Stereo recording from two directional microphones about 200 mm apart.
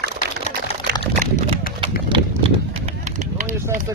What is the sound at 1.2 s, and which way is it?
Horse, 25° right (ahead or behind).